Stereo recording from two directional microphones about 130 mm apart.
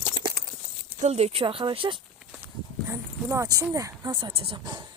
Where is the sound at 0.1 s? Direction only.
35° right (ahead or behind).